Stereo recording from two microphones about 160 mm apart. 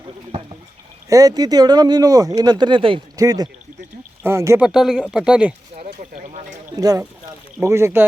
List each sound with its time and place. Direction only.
1.1 s speech: 25° right (ahead or behind)
4.6 s speech: 5° right (ahead or behind)
6.7 s speech: 25° right (ahead or behind)